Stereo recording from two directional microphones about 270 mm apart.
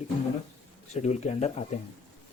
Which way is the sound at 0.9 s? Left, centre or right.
Left.